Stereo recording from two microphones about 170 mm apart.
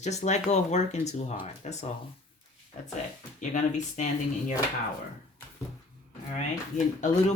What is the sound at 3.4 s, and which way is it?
Speech, 45° left (ahead or behind).